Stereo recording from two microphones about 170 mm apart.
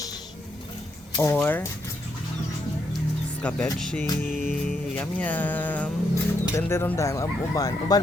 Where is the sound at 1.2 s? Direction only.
10° left (ahead or behind).